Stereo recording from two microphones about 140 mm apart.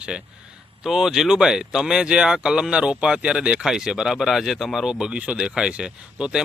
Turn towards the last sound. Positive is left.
turn(degrees=-5)  # may be behind; listen again after turning